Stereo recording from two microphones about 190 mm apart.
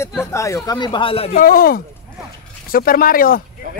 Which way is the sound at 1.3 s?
50° left (ahead or behind).